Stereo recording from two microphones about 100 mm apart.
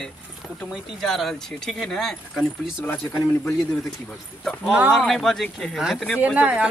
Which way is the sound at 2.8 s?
20° left (ahead or behind).